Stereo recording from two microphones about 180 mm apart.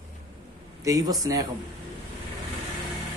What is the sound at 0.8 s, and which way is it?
Speech, 20° right (ahead or behind).